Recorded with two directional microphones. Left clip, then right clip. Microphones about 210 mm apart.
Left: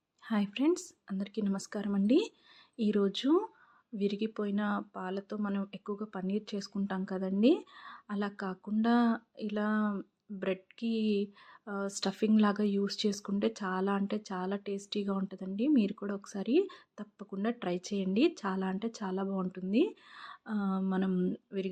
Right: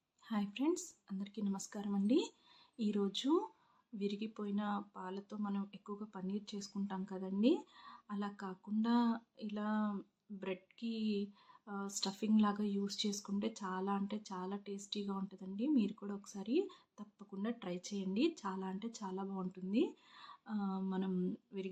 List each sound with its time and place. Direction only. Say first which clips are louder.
0.3 s speech: left 7 dB; 30° left (ahead or behind)